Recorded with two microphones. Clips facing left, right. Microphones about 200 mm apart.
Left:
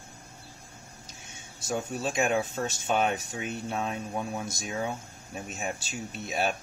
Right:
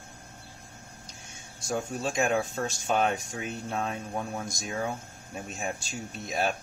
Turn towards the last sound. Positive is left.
turn(degrees=0)  # may be behind; listen again after turning